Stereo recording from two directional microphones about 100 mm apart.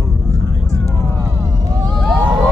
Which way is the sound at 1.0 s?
25° left (ahead or behind).